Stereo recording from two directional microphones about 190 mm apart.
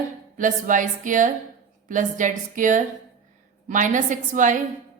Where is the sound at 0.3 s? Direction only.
45° right (ahead or behind).